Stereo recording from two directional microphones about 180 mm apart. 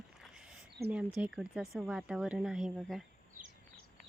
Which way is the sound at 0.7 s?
65° right (ahead or behind).